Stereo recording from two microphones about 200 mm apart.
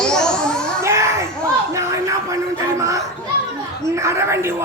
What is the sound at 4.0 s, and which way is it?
Speech, 15° right (ahead or behind).